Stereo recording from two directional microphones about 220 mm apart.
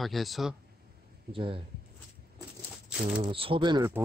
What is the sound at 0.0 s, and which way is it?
Speech, centre (ahead or behind).